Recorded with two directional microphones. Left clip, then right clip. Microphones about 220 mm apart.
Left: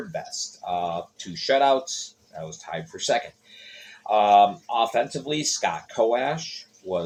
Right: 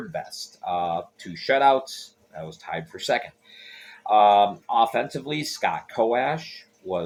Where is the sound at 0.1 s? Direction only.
20° right (ahead or behind).